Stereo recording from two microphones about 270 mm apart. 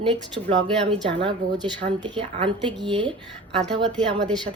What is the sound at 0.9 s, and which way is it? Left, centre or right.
A woman's voice, centre.